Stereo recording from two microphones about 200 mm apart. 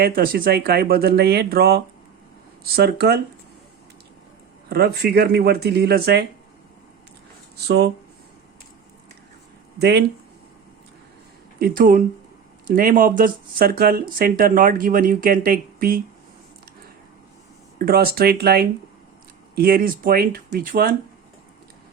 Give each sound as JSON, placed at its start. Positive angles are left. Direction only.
{"t": 0.0, "sound": "speech", "side_deg": -45}
{"t": 4.7, "sound": "speech", "side_deg": -55}
{"t": 7.5, "sound": "speech", "side_deg": -55}
{"t": 9.7, "sound": "speech", "side_deg": -55}
{"t": 11.6, "sound": "speech", "side_deg": -45}
{"t": 17.7, "sound": "speech", "side_deg": -50}